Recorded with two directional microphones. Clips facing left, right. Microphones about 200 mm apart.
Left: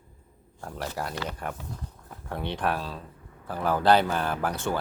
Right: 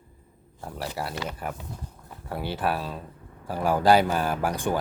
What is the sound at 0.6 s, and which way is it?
Speech, 5° right (ahead or behind).